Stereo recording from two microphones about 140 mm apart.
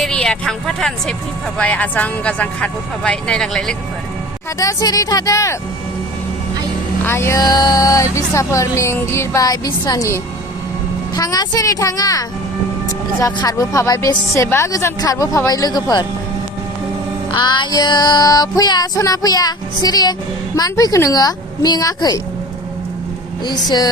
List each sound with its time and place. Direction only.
0.0 s speech: 5° left (ahead or behind)
4.6 s child singing: 25° left (ahead or behind)
7.0 s child singing: 15° left (ahead or behind)
17.3 s child singing: 35° left (ahead or behind)
23.5 s child singing: 30° left (ahead or behind)